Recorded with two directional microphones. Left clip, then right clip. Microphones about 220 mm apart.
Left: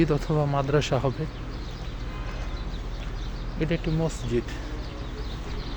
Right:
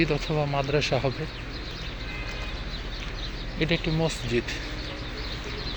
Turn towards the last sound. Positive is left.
turn(degrees=5)  # may be behind; listen again after turning